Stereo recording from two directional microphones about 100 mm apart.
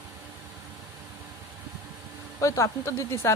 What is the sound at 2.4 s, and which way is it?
Speech, 30° left (ahead or behind).